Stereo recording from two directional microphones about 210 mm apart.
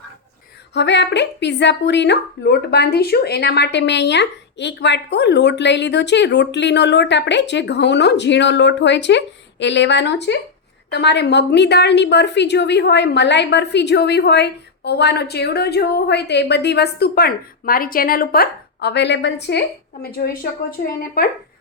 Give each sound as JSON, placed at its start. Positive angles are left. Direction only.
{"t": 0.7, "sound": "a woman's voice", "side_deg": 55}